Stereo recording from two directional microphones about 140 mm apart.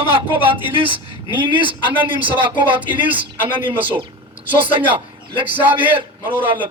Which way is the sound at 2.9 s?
10° right (ahead or behind).